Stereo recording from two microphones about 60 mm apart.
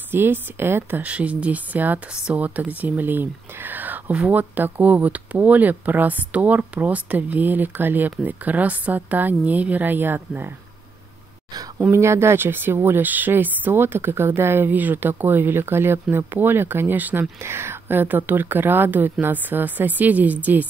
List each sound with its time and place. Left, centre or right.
0.1 s speech: right
2.1 s speech: centre
2.4 s speech: right
11.9 s speech: right